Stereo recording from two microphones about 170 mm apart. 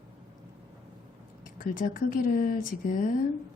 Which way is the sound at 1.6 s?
55° left (ahead or behind).